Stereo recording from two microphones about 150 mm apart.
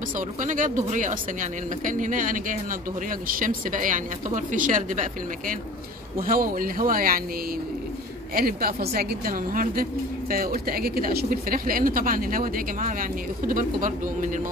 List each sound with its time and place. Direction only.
0.4 s speech: 55° right (ahead or behind)
8.4 s speech: 75° right (ahead or behind)
10.3 s speech: 80° right; by 14.4 s 60° right (ahead or behind)